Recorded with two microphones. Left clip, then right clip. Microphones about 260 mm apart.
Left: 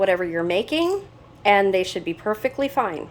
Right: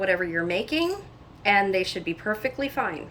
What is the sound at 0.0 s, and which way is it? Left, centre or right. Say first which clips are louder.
A woman's voice: left 4 dB; centre.